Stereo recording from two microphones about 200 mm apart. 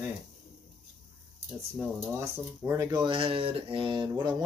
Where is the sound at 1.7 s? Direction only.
10° right (ahead or behind).